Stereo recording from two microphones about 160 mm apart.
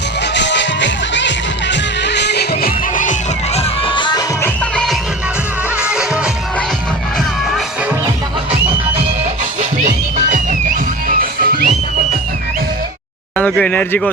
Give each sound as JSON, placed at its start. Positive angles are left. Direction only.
{"t": 0.3, "sound": "music", "side_deg": 90}
{"t": 4.4, "sound": "music", "side_deg": 10}
{"t": 5.7, "sound": "music", "side_deg": -5}
{"t": 9.6, "sound": "music", "side_deg": -50}
{"t": 13.3, "sound": "speech", "side_deg": 10}